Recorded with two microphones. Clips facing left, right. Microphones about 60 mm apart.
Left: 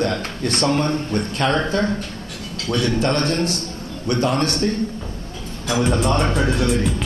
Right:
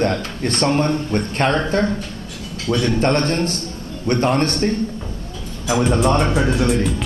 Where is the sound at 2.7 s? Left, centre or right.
Right.